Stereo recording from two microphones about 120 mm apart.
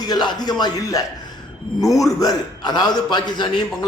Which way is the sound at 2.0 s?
30° left (ahead or behind).